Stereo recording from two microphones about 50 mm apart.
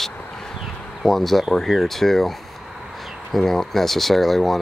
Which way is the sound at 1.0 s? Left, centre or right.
Centre.